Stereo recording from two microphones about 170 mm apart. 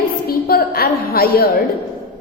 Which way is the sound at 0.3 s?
65° left (ahead or behind).